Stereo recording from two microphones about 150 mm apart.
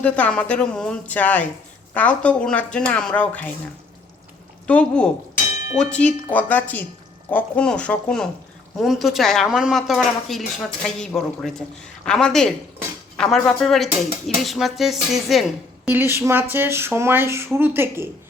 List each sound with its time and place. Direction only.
0.0 s speech: 10° left (ahead or behind)
4.6 s speech: 10° left (ahead or behind)
15.9 s speech: 15° right (ahead or behind)